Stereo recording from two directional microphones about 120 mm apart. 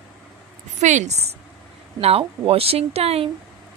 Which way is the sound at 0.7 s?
80° right.